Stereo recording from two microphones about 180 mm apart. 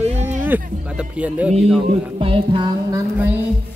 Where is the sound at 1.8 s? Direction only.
30° right (ahead or behind).